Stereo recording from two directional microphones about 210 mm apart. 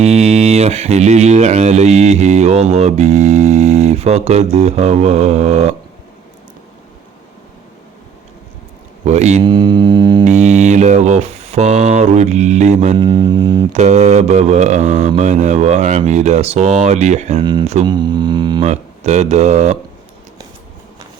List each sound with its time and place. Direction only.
0.0 s speech: 30° right (ahead or behind)
9.0 s speech: 30° right (ahead or behind)
10.2 s speech: 35° right (ahead or behind)
13.0 s mantra: 20° right (ahead or behind)
13.7 s speech: 30° right (ahead or behind)
18.7 s speech: 30° right (ahead or behind)